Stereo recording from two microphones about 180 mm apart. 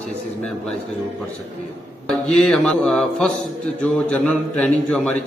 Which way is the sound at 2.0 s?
5° left (ahead or behind).